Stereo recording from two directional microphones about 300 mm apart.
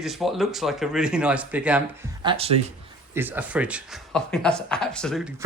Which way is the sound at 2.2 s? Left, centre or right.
Centre.